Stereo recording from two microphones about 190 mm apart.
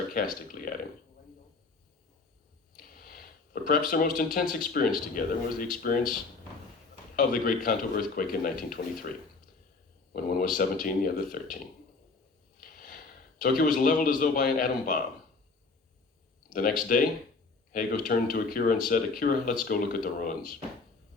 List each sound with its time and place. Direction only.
0.4 s speech: 45° left (ahead or behind)
2.7 s a sound: 50° left (ahead or behind)
3.7 s speech: 45° left (ahead or behind)
7.2 s speech: 50° left (ahead or behind)
10.1 s speech: 50° left (ahead or behind)
12.5 s a sound: 50° left (ahead or behind)
13.4 s speech: 50° left (ahead or behind)
16.5 s speech: 45° left (ahead or behind)